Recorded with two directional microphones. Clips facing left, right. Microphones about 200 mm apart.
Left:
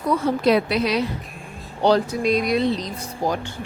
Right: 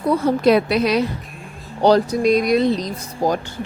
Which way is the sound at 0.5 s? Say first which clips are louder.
Right 3 dB; 50° right (ahead or behind).